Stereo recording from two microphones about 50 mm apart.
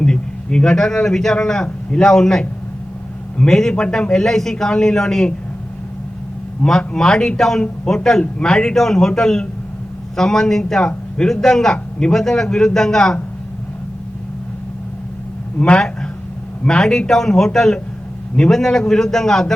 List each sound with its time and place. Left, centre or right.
0.0 s a man's voice: centre
6.6 s a man's voice: centre
15.5 s a man's voice: left